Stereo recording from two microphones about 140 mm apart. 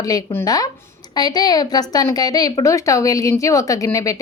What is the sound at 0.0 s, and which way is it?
A woman's voice, 25° left (ahead or behind).